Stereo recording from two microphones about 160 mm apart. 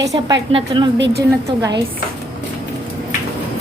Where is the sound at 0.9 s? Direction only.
90° right.